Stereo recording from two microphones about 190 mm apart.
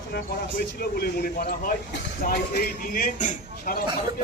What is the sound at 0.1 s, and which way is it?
A man's voice, 55° left (ahead or behind).